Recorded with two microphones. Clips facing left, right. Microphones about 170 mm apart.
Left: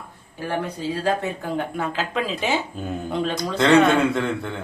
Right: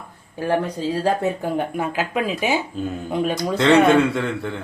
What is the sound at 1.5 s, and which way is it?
Speech, 15° right (ahead or behind).